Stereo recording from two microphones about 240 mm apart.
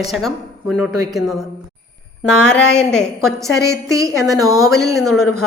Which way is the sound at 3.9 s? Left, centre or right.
Centre.